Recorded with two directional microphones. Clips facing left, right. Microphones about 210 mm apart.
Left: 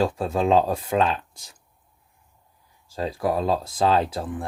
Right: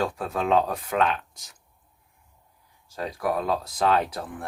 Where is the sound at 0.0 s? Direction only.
25° left (ahead or behind).